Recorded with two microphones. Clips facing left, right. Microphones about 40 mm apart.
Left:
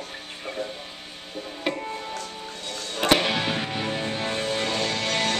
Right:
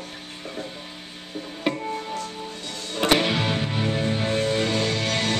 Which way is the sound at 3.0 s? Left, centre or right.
Centre.